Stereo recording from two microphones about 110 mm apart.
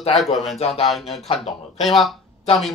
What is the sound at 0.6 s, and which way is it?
Speech, 65° left (ahead or behind).